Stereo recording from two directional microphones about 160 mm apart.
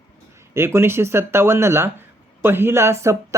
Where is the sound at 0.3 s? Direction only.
15° right (ahead or behind).